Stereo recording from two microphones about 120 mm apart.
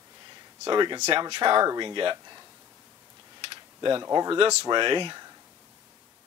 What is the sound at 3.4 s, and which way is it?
Typing, 45° right (ahead or behind).